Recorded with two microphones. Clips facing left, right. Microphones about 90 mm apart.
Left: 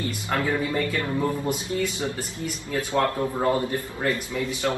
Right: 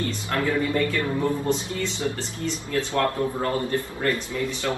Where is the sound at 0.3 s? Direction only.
15° left (ahead or behind).